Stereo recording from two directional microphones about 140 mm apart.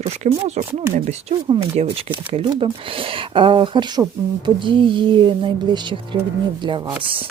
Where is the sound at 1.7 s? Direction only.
40° right (ahead or behind).